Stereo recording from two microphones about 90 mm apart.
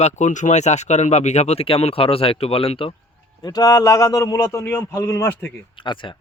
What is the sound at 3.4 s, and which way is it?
A man's voice, 45° left (ahead or behind).